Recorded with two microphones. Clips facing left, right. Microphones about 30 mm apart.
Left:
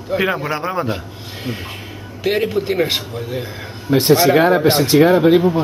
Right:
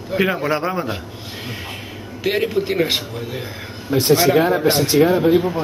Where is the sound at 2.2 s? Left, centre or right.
Centre.